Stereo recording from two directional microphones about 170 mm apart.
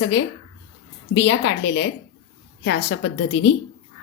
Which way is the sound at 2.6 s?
80° left.